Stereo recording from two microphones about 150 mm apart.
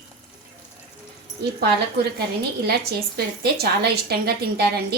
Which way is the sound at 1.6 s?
90° right.